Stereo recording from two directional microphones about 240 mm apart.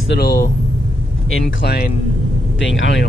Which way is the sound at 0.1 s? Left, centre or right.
Left.